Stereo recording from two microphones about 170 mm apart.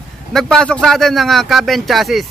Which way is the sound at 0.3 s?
Centre (ahead or behind).